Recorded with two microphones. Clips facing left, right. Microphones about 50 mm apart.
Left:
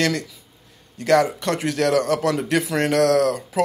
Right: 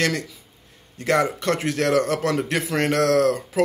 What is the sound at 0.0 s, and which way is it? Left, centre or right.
Speech, right.